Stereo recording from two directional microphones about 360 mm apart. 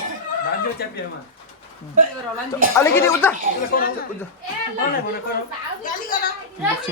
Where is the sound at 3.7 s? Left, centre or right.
Left.